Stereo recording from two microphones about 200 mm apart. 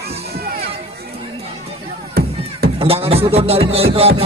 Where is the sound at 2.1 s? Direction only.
50° right (ahead or behind).